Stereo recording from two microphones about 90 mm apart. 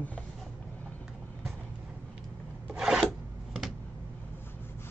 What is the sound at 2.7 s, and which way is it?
Filing, 5° right (ahead or behind).